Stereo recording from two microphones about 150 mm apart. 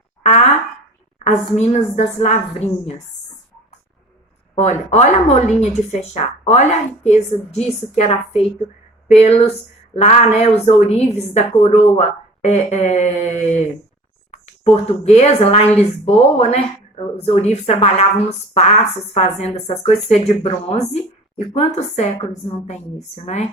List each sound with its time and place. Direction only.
0.2 s a sound: 50° left (ahead or behind)
1.2 s a woman's voice: 50° left (ahead or behind)
4.5 s a woman's voice: 50° left (ahead or behind)
9.1 s a woman's voice: 40° left (ahead or behind)